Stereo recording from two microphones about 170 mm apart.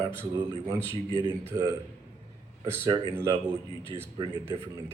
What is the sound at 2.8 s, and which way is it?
Speech, 25° right (ahead or behind).